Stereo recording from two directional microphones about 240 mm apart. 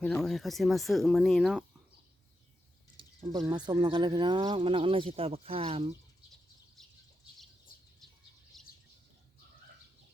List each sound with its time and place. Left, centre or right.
0.0 s speech: centre
3.0 s speech: centre
8.5 s bird: centre